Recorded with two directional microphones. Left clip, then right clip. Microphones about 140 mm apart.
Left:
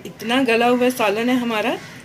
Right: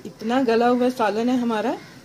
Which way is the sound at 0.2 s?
60° right (ahead or behind).